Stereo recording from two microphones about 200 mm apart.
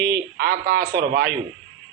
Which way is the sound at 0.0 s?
50° right (ahead or behind).